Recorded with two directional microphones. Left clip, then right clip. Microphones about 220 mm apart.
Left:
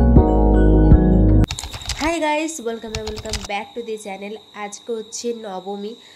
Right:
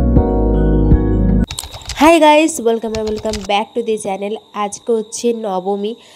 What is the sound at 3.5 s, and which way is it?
A woman's voice, 40° right (ahead or behind).